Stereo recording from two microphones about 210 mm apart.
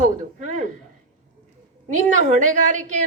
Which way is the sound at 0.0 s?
35° right (ahead or behind).